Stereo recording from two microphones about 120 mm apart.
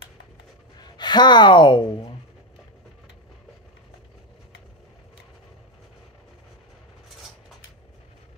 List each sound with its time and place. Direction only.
0.9 s speech: 40° left (ahead or behind)